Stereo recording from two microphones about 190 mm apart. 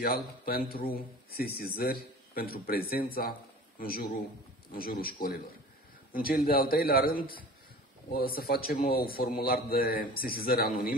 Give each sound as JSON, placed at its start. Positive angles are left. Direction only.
{"t": 0.0, "sound": "a man's voice", "side_deg": 50}